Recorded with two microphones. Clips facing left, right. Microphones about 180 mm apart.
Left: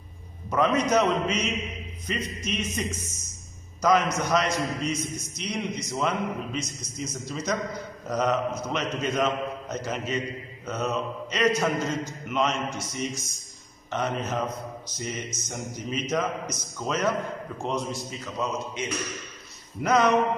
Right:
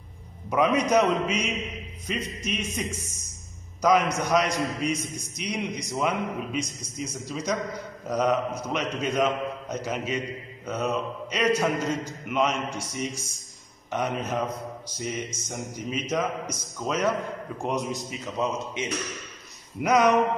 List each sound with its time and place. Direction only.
0.5 s a man's voice: 10° right (ahead or behind)